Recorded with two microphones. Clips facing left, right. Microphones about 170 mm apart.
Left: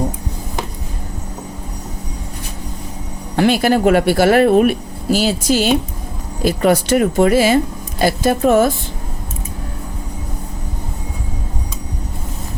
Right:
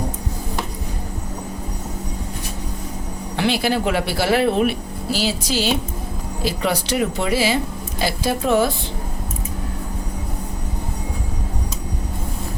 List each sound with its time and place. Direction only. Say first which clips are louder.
3.3 s speech: left 6 dB; 50° left (ahead or behind)